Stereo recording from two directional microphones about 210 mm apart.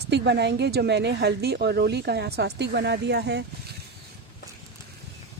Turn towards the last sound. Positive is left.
turn(degrees=-55)  # may be behind; listen again after turning